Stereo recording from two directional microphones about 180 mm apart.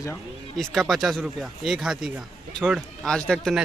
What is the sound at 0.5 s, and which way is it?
Music, centre (ahead or behind).